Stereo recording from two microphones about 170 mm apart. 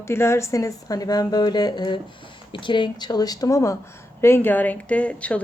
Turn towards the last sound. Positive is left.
turn(degrees=10)  # may be behind; listen again after turning